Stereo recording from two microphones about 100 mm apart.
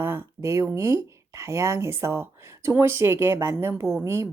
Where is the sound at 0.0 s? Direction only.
25° right (ahead or behind).